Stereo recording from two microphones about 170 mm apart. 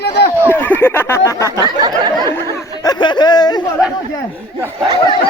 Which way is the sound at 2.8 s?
25° left (ahead or behind).